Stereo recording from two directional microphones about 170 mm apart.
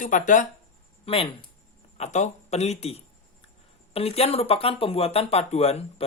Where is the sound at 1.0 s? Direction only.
35° left (ahead or behind).